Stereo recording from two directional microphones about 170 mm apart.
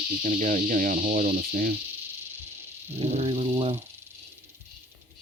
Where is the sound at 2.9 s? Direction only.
35° right (ahead or behind).